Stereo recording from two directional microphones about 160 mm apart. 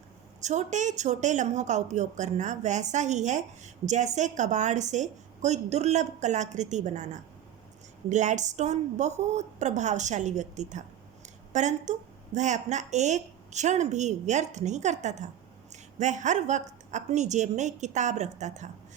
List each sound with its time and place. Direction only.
0.4 s a woman's voice: 50° right (ahead or behind)